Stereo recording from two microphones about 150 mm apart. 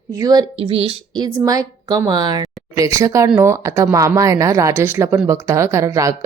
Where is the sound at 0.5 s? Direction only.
40° right (ahead or behind).